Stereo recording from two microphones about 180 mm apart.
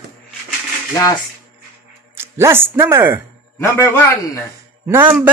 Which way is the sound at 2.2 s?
15° right (ahead or behind).